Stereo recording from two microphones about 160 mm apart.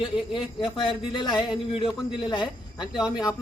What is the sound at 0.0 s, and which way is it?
Speech, 5° right (ahead or behind).